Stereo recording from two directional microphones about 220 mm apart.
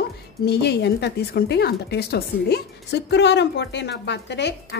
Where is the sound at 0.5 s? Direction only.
50° left (ahead or behind).